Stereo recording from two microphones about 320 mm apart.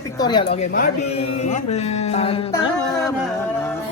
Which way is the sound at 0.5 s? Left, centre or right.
Left.